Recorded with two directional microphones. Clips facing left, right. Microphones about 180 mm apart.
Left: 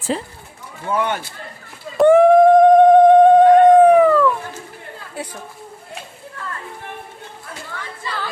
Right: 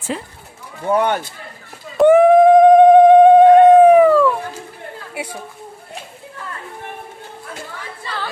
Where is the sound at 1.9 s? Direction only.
Centre (ahead or behind).